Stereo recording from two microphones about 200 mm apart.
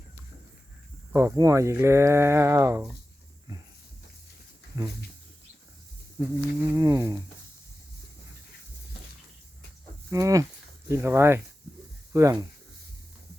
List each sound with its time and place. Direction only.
1.1 s speech: 15° right (ahead or behind)
4.7 s speech: 20° right (ahead or behind)
6.2 s livestock: 15° right (ahead or behind)
6.7 s speech: 15° right (ahead or behind)
10.1 s speech: 15° right (ahead or behind)